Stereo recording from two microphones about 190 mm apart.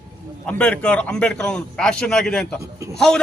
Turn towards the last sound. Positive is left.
turn(degrees=5)  # may be behind; listen again after turning